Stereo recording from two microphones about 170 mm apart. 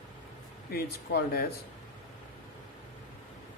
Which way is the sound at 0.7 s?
65° left (ahead or behind).